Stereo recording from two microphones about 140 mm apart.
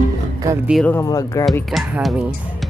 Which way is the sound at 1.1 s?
25° left (ahead or behind).